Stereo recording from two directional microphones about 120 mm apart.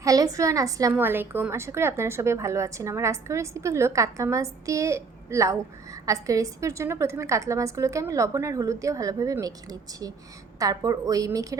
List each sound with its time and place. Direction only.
0.0 s a woman's voice: 30° right (ahead or behind)
0.9 s a woman's voice: 15° right (ahead or behind)